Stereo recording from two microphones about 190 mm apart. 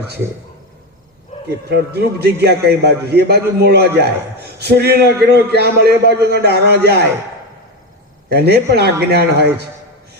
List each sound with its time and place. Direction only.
1.5 s a man's voice: 60° right (ahead or behind)
8.3 s a man's voice: 60° right (ahead or behind)